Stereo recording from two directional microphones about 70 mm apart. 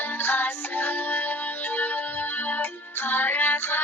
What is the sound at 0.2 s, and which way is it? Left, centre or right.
Music, left.